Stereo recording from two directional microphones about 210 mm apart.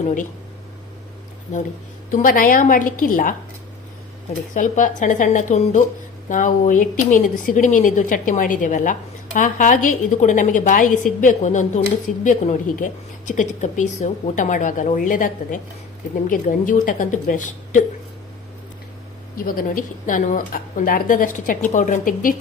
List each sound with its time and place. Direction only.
2.0 s speech: 40° left (ahead or behind)
4.5 s speech: 40° left (ahead or behind)
19.5 s speech: 40° left (ahead or behind)